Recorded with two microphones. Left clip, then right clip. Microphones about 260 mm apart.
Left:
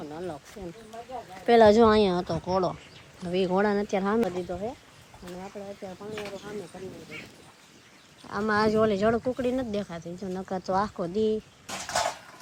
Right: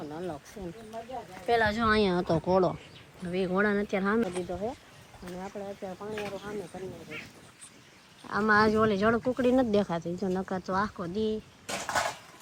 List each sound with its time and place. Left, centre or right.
0.0 s speech: centre
1.5 s speech: left; by 4.7 s centre
5.4 s speech: centre
8.3 s speech: centre
11.6 s cutlery: right